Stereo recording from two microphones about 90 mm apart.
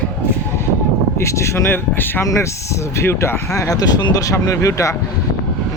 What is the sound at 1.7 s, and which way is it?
Speech, 20° left (ahead or behind).